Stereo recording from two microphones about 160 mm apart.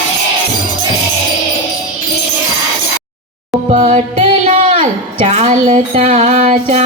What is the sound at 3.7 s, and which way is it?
A woman's voice, 50° right (ahead or behind).